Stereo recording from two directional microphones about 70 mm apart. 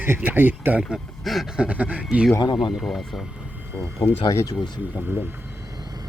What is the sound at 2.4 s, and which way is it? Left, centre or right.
Speech, left.